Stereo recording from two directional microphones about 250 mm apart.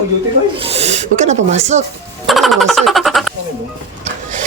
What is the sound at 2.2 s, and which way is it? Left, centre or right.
Speech, centre.